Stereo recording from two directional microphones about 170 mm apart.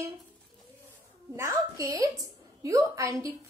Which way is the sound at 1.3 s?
15° right (ahead or behind).